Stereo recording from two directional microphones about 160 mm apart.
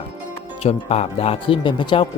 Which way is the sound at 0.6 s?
40° left (ahead or behind).